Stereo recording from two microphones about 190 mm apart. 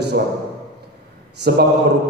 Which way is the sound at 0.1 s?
55° right (ahead or behind).